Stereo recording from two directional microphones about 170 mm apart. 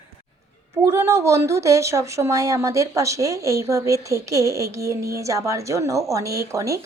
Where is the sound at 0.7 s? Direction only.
15° right (ahead or behind).